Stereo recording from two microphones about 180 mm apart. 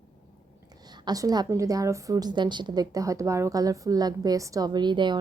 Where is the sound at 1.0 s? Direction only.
20° right (ahead or behind).